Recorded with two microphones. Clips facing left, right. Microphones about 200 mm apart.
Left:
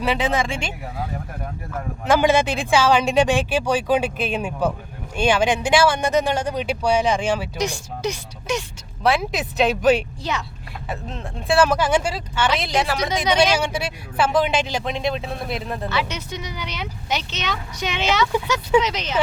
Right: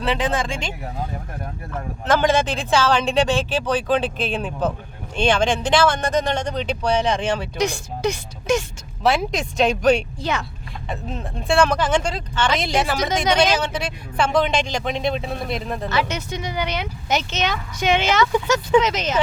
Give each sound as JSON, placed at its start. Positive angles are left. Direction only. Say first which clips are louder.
{"t": 0.0, "sound": "speech", "louder": "left 1 dB", "side_deg": 10}
{"t": 2.0, "sound": "speech", "louder": "left 1 dB", "side_deg": 10}
{"t": 7.6, "sound": "speech", "louder": "right 3 dB", "side_deg": -55}
{"t": 9.0, "sound": "speech", "louder": "right 1 dB", "side_deg": 0}
{"t": 10.3, "sound": "speech", "louder": "right 3 dB", "side_deg": -55}
{"t": 10.8, "sound": "speech", "louder": "right 1 dB", "side_deg": 0}
{"t": 13.6, "sound": "speech", "louder": "left 1 dB", "side_deg": 10}
{"t": 15.9, "sound": "speech", "louder": "right 5 dB", "side_deg": -45}